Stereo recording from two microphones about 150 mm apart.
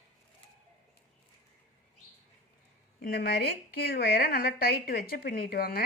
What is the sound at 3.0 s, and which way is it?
A woman's voice, 90° left.